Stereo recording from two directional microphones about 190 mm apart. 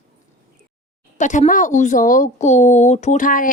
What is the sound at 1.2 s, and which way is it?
Speech, 40° left (ahead or behind).